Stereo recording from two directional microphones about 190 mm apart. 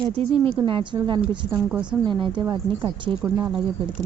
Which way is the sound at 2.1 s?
25° right (ahead or behind).